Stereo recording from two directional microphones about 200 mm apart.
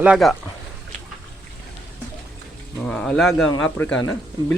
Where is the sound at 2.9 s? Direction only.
5° left (ahead or behind).